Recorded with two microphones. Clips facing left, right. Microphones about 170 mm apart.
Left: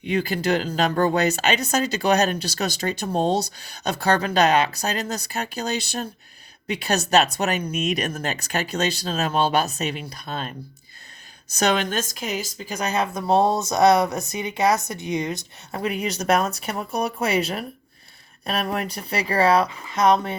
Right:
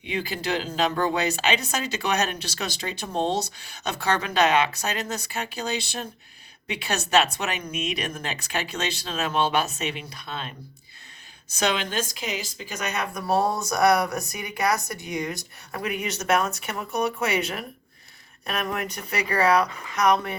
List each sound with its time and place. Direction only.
0.0 s speech: 45° left (ahead or behind)
11.5 s speech: 45° left (ahead or behind); by 20.3 s 25° left (ahead or behind)